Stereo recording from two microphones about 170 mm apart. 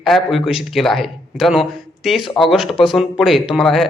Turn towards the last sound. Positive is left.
turn(degrees=0)  # may be behind; listen again after turning